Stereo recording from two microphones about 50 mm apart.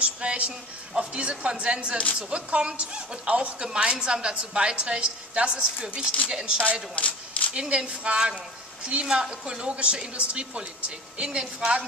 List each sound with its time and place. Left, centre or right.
0.0 s a woman's voice: right
7.0 s a sound: left
7.5 s a woman's voice: centre
9.0 s a woman's voice: centre